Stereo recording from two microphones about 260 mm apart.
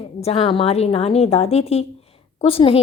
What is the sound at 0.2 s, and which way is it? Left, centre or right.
A woman's voice, left.